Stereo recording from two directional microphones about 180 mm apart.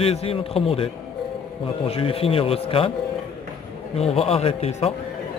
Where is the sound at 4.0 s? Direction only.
35° left (ahead or behind).